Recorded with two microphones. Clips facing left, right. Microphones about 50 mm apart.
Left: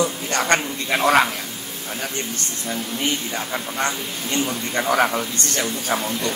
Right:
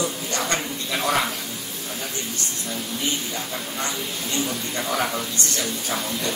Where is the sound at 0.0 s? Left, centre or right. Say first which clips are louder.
Left 4 dB; left.